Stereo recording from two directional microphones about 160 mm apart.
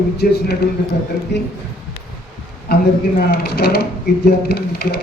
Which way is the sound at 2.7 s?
75° left (ahead or behind).